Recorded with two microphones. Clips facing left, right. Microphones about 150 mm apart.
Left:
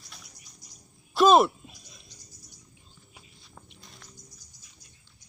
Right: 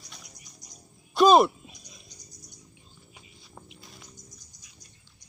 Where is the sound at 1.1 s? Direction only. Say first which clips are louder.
Right 1 dB; centre (ahead or behind).